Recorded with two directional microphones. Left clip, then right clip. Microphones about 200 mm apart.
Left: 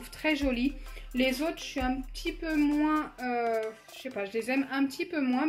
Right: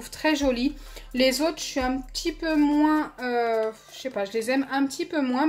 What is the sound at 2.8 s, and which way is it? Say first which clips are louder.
A woman's voice: right 6 dB; 35° right (ahead or behind).